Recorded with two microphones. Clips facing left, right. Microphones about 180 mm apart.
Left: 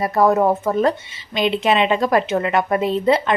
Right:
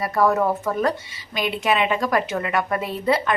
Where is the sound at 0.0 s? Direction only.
25° left (ahead or behind).